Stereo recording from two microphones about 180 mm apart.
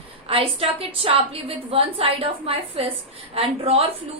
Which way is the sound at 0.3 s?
30° right (ahead or behind).